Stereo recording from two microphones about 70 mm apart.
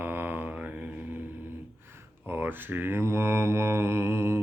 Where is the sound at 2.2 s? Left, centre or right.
Right.